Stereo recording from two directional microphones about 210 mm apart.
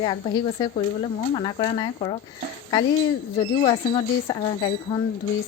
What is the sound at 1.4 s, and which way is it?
Speech, 25° left (ahead or behind).